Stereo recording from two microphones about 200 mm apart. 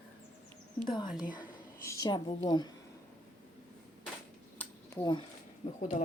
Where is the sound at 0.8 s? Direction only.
25° left (ahead or behind).